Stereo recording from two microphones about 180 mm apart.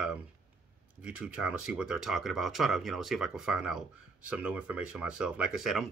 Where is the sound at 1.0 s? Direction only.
5° right (ahead or behind).